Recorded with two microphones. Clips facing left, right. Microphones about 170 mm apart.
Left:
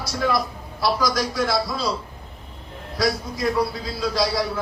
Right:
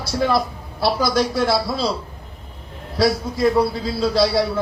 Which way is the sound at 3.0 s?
30° right (ahead or behind).